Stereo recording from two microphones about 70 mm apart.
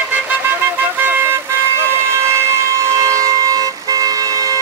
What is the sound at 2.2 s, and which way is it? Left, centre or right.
Vehicle, right.